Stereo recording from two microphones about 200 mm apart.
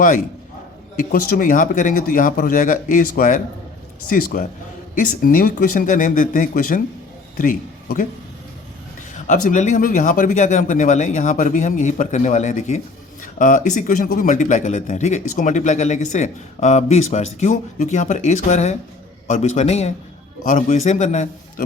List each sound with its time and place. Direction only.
0.9 s speech: 45° left (ahead or behind)
9.2 s speech: 40° left (ahead or behind)